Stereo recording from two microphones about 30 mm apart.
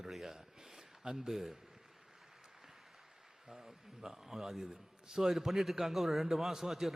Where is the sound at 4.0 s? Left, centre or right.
Centre.